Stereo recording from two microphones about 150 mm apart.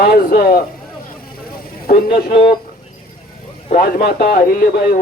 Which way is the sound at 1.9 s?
90° left.